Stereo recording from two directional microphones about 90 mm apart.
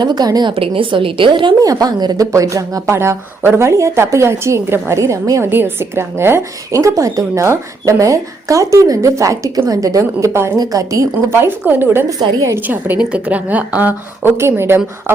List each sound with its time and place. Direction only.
0.0 s a woman's voice: 50° right (ahead or behind)
0.5 s a woman's voice: 90° right; by 1.5 s 60° right (ahead or behind)
1.6 s a woman's voice: 45° right (ahead or behind)
2.3 s a woman's voice: 35° right (ahead or behind)
5.4 s a woman's voice: 25° right (ahead or behind); by 11.3 s 40° right (ahead or behind)
11.4 s a woman's voice: 25° right (ahead or behind)
14.3 s a woman's voice: 30° right (ahead or behind)